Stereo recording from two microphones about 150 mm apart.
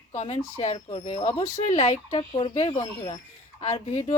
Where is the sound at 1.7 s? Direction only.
50° left (ahead or behind).